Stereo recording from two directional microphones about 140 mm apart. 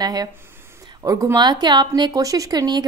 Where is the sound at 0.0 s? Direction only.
30° right (ahead or behind).